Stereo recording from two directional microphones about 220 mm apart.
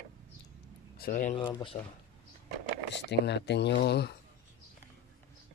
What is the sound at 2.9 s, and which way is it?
Speech, 50° left (ahead or behind).